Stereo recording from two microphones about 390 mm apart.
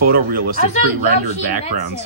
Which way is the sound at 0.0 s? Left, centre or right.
Right.